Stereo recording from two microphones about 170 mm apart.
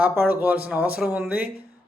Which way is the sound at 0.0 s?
10° right (ahead or behind).